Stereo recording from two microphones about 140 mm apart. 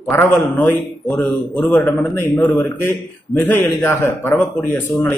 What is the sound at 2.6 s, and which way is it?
A man's voice, 15° left (ahead or behind).